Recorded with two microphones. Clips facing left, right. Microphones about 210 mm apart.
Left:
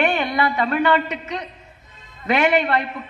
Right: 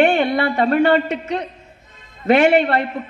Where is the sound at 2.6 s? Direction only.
50° right (ahead or behind).